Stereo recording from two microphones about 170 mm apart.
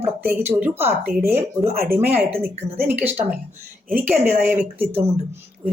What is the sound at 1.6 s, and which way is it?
Speech, 60° right (ahead or behind).